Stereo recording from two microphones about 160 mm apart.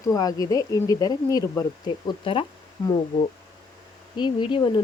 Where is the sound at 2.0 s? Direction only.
35° left (ahead or behind).